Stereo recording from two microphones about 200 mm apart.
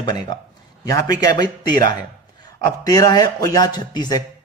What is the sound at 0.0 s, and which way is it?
A man's voice, 20° left (ahead or behind).